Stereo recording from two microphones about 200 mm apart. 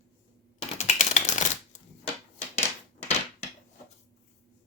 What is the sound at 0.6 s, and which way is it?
Typing, 35° left (ahead or behind).